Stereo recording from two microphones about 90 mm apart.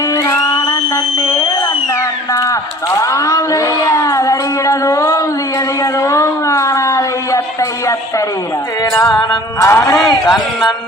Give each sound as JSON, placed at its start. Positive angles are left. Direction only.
{"t": 0.1, "sound": "music", "side_deg": 40}
{"t": 2.3, "sound": "a sound", "side_deg": 40}
{"t": 9.6, "sound": "a man's voice", "side_deg": 35}
{"t": 10.0, "sound": "speech", "side_deg": 5}